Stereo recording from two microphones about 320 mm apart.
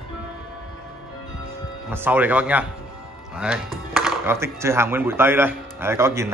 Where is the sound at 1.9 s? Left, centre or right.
Centre.